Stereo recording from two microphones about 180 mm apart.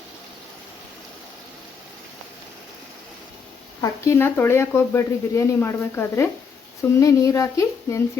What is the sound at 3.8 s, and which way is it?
Speech, 15° left (ahead or behind).